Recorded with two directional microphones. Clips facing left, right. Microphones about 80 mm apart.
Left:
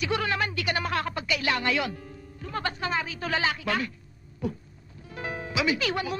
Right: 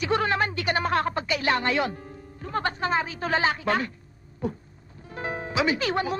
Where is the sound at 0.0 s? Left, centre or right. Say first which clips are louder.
Right 3 dB; right.